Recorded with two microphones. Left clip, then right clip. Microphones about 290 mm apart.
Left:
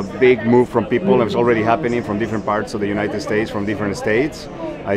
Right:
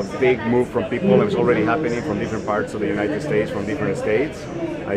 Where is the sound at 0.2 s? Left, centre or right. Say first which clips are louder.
Left 5 dB; left.